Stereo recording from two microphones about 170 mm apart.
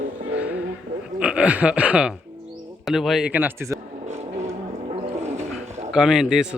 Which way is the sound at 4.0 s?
40° right (ahead or behind).